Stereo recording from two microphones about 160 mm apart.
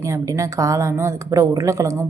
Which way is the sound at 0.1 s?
20° right (ahead or behind).